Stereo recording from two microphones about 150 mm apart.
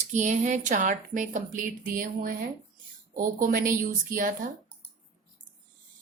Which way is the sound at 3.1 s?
65° right (ahead or behind).